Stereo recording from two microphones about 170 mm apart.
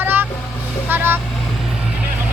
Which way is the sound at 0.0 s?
10° right (ahead or behind).